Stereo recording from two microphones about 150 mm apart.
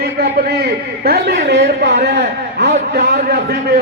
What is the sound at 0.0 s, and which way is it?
A man's voice, 90° right.